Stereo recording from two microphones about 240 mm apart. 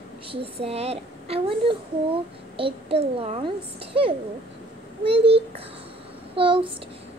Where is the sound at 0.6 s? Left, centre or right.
Right.